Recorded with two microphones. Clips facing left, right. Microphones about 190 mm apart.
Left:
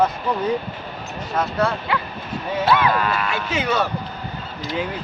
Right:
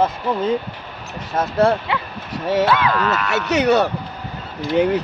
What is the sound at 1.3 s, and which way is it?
Speech, 25° right (ahead or behind).